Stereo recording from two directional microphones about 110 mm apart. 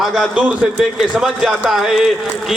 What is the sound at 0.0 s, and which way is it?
A man's voice, centre (ahead or behind).